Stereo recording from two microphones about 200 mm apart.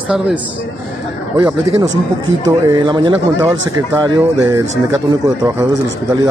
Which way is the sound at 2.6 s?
20° right (ahead or behind).